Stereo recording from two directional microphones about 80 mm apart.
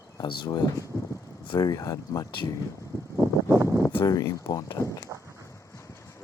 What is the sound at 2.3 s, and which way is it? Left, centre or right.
Speech, left.